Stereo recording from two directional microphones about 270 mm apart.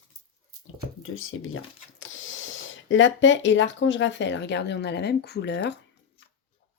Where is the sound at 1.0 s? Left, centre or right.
Left.